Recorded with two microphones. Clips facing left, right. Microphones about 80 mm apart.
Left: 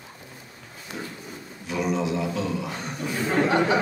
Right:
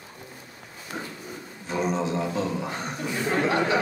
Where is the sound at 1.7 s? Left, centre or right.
Right.